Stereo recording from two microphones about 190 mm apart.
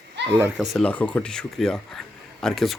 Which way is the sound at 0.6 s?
Centre (ahead or behind).